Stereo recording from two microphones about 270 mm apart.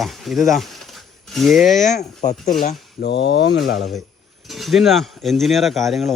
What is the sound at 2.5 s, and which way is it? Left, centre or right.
Speech, left.